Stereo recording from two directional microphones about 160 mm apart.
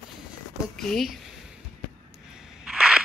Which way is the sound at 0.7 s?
Centre (ahead or behind).